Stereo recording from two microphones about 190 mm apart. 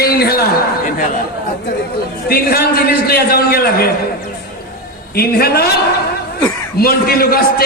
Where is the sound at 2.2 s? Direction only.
55° left (ahead or behind).